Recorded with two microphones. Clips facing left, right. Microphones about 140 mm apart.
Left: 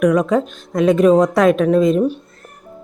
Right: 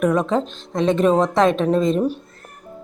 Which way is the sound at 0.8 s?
5° left (ahead or behind).